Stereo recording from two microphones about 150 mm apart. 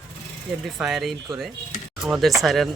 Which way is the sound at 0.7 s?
5° right (ahead or behind).